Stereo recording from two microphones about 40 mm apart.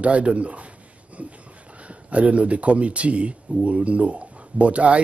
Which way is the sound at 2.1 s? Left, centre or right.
Right.